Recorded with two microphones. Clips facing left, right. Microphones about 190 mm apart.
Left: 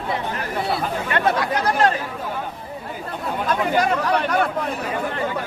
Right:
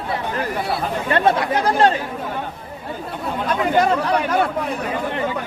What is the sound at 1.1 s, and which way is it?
Speech, 30° right (ahead or behind).